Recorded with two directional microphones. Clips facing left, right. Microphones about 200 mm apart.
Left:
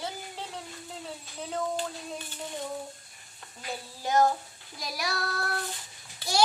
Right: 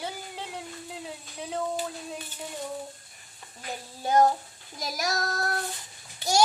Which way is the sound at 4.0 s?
30° right (ahead or behind).